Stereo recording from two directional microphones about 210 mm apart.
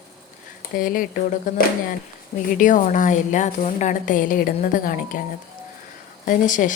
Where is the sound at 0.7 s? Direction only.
40° left (ahead or behind).